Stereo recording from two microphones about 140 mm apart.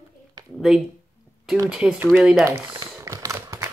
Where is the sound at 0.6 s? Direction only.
Centre (ahead or behind).